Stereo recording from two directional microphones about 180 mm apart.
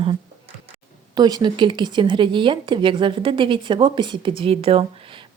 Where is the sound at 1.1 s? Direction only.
25° right (ahead or behind).